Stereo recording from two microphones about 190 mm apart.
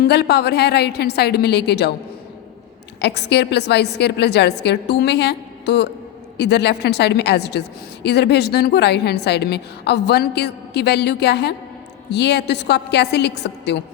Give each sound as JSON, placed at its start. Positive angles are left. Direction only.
{"t": 0.0, "sound": "a woman's voice", "side_deg": 60}
{"t": 3.0, "sound": "a woman's voice", "side_deg": 60}